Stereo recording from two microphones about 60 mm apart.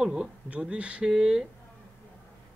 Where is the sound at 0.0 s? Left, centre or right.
Centre.